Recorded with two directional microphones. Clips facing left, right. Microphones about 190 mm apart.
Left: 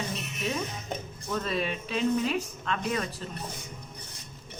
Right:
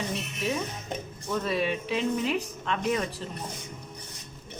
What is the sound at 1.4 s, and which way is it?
Speech, 10° right (ahead or behind).